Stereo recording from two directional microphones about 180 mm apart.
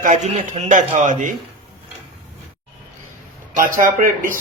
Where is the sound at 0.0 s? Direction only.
40° right (ahead or behind).